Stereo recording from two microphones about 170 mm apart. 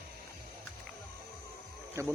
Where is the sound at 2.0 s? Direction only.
15° right (ahead or behind).